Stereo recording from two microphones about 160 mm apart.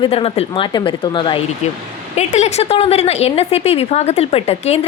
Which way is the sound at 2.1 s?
45° left (ahead or behind).